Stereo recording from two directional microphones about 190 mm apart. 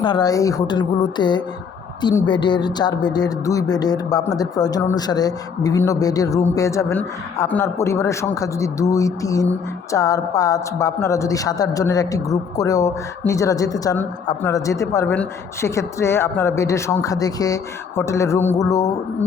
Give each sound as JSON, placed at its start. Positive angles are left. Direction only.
{"t": 0.0, "sound": "a woman's voice", "side_deg": 20}